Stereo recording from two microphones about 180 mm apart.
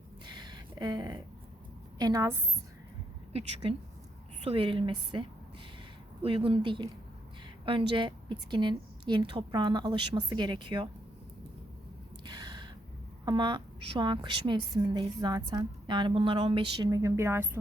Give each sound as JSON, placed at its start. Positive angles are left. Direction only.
{"t": 0.3, "sound": "a sound", "side_deg": -25}
{"t": 2.0, "sound": "a woman's voice", "side_deg": -20}
{"t": 3.3, "sound": "a woman's voice", "side_deg": -35}
{"t": 6.2, "sound": "a woman's voice", "side_deg": -30}
{"t": 12.2, "sound": "gasp", "side_deg": -25}
{"t": 13.2, "sound": "a woman's voice", "side_deg": -25}